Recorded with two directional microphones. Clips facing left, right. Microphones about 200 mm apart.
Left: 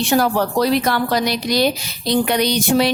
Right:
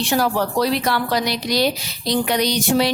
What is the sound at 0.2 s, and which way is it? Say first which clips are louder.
A woman's voice: left 2 dB; 50° left (ahead or behind).